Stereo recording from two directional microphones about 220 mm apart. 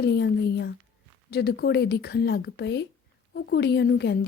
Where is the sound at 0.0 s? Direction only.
50° left (ahead or behind).